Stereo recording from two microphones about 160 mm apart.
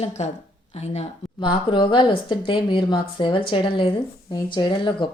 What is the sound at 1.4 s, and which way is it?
Speech, 30° left (ahead or behind).